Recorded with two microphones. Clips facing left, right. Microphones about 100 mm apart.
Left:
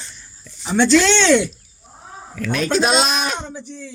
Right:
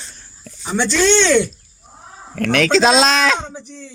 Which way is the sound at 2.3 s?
65° right (ahead or behind).